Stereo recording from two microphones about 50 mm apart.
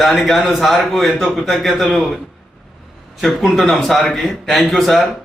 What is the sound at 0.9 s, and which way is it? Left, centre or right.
A man's voice, centre.